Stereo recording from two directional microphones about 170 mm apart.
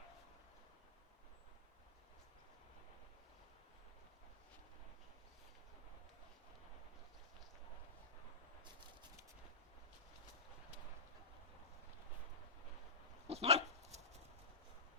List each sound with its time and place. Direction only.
13.2 s dog: 35° right (ahead or behind)